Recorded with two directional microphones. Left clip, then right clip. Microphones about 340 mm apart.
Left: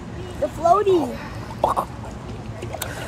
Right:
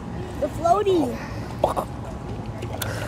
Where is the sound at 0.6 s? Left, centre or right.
Centre.